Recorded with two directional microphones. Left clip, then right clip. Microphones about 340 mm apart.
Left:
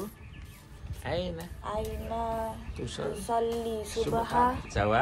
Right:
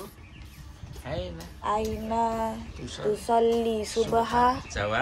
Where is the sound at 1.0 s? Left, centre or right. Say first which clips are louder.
Left 2 dB; left.